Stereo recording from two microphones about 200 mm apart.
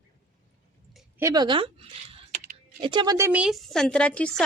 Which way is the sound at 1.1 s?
15° right (ahead or behind).